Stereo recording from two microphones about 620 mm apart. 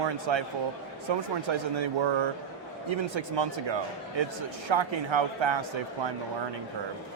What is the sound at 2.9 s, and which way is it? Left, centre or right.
Speech, right.